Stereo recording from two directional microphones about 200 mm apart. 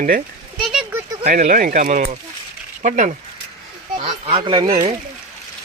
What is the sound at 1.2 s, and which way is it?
Speech, 45° right (ahead or behind).